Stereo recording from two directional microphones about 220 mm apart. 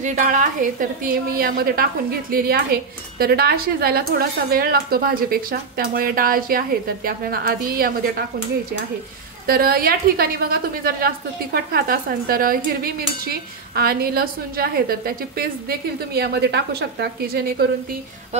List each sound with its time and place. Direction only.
0.0 s a woman's voice: 35° right (ahead or behind)
9.5 s speech: 40° right (ahead or behind)